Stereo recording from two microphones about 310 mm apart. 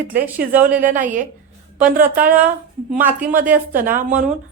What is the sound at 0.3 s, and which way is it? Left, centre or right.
Speech, centre.